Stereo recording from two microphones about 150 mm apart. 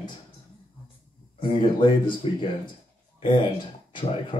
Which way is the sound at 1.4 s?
35° left (ahead or behind).